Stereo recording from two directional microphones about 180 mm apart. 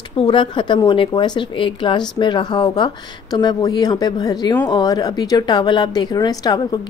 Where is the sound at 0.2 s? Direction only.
25° left (ahead or behind).